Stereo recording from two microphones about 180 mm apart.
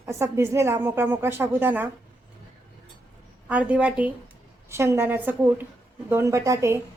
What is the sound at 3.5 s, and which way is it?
Speech, 5° right (ahead or behind).